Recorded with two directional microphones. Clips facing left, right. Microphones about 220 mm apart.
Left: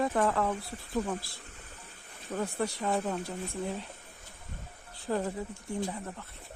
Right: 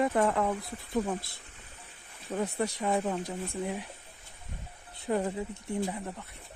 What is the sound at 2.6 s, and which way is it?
Speech, 20° right (ahead or behind).